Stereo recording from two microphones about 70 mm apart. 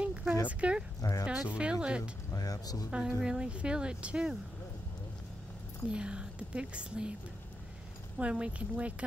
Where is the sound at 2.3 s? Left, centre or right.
Left.